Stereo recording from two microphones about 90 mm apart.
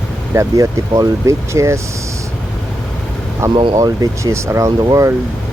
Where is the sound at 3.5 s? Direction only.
75° right (ahead or behind).